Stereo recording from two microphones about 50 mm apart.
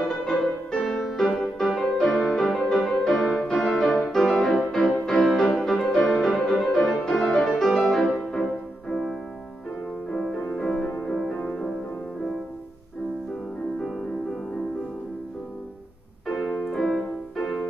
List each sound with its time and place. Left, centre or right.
0.2 s music: centre
1.0 s music: centre
10.1 s music: centre
16.3 s music: centre